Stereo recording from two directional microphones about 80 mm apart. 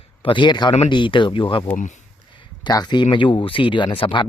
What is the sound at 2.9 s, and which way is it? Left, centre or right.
Speech, left.